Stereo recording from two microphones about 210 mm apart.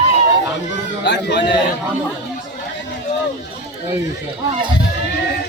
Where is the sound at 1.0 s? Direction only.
55° left (ahead or behind).